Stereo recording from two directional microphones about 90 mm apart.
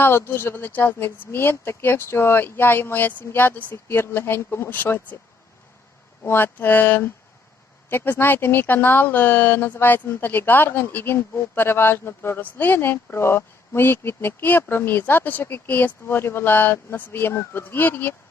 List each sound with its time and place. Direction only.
0.0 s speech: 25° left (ahead or behind)
6.2 s speech: 25° left (ahead or behind)